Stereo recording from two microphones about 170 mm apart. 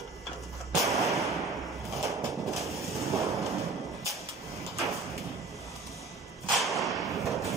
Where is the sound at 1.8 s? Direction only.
20° right (ahead or behind).